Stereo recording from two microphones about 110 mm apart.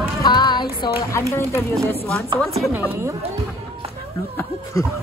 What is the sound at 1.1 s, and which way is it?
Speech, 25° left (ahead or behind).